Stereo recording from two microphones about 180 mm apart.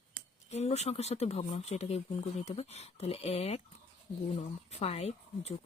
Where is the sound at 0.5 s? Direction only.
35° left (ahead or behind).